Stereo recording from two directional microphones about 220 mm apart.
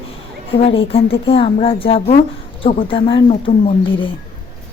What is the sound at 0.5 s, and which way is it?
Speech, 25° left (ahead or behind).